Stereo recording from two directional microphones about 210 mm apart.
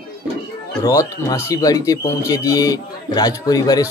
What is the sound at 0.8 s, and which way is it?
A man's voice, 15° left (ahead or behind).